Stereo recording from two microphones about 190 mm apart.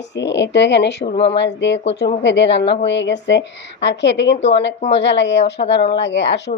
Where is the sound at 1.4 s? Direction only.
70° left (ahead or behind).